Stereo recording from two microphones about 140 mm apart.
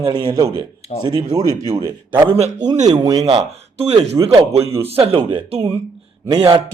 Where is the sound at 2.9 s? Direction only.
25° right (ahead or behind).